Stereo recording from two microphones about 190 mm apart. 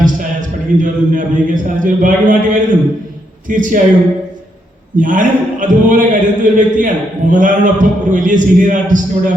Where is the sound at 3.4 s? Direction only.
45° right (ahead or behind).